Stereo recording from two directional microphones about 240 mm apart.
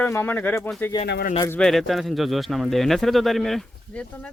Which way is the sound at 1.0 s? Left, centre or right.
Left.